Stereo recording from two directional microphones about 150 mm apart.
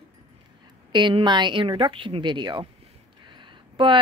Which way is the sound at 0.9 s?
30° right (ahead or behind).